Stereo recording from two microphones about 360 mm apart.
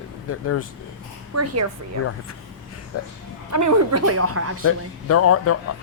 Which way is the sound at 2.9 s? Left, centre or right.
Left.